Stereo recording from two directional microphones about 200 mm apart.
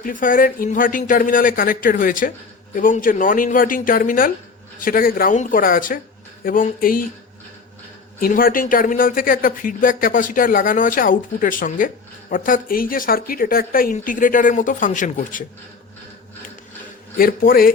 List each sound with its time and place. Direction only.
0.0 s speech: 45° left (ahead or behind)
8.2 s speech: 45° left (ahead or behind)
17.2 s speech: 45° left (ahead or behind)